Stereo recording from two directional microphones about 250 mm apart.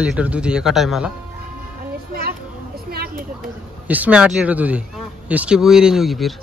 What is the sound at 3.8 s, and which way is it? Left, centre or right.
A man's voice, centre.